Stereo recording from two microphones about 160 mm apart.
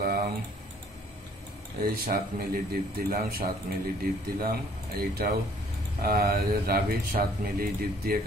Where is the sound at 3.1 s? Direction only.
70° right (ahead or behind).